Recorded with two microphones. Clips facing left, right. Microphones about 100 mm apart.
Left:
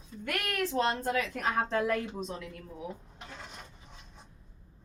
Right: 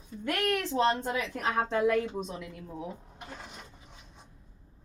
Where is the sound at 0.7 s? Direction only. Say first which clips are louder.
Even; 20° right (ahead or behind).